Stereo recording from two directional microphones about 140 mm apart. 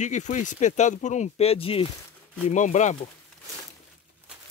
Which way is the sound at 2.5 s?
60° left (ahead or behind).